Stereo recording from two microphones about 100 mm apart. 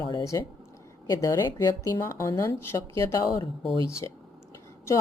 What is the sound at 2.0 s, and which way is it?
A woman's voice, 30° left (ahead or behind).